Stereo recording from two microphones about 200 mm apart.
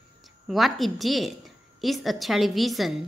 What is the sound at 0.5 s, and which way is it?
A woman's voice, centre (ahead or behind).